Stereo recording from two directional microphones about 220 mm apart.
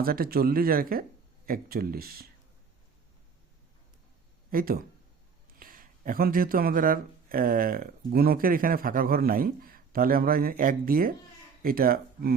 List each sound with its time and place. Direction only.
0.0 s speech: 40° right (ahead or behind)
4.5 s speech: 40° right (ahead or behind)